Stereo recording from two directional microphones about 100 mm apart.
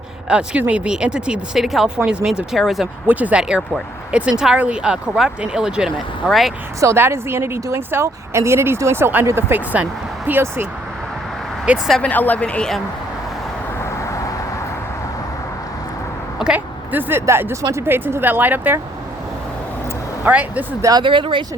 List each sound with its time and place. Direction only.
0.3 s speech: 10° right (ahead or behind)
3.1 s speech: 15° right (ahead or behind); by 6.5 s centre (ahead or behind)
6.7 s speech: 25° right (ahead or behind)
11.7 s speech: 10° right (ahead or behind)
12.0 s speech: 15° left (ahead or behind)
16.4 s speech: 15° right (ahead or behind)
20.2 s speech: 15° right (ahead or behind)
21.0 s speech: 55° right (ahead or behind)